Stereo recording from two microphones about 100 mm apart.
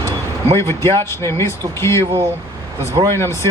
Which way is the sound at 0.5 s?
25° left (ahead or behind).